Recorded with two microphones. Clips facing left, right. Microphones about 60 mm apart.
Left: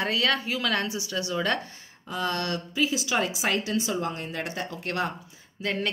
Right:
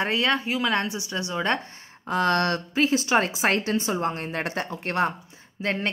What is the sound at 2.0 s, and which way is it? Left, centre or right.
A woman's voice, right.